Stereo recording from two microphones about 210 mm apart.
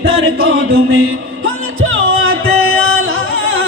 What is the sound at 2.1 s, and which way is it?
Music, 80° right.